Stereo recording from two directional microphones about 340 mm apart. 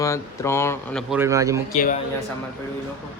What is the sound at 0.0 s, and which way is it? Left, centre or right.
Speech, centre.